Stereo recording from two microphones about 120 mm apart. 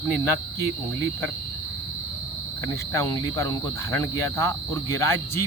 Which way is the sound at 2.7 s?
25° left (ahead or behind).